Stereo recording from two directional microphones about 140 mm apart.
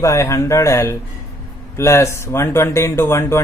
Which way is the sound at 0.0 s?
20° left (ahead or behind).